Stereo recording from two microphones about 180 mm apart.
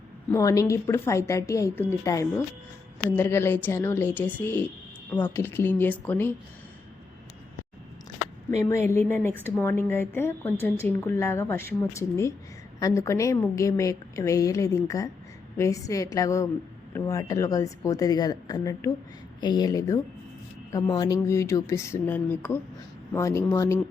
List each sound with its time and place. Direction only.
0.3 s a woman's voice: 20° left (ahead or behind)
8.7 s a woman's voice: 15° left (ahead or behind)